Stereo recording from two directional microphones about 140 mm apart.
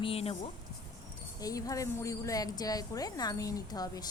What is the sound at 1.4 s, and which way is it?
A woman's voice, 25° left (ahead or behind).